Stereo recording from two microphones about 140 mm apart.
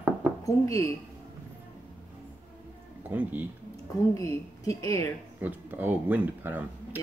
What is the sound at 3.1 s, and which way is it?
Speech, 10° right (ahead or behind).